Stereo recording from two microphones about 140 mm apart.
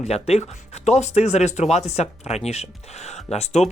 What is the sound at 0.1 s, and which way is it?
Speech, 50° left (ahead or behind).